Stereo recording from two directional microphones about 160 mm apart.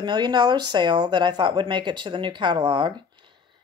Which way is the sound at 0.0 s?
25° right (ahead or behind).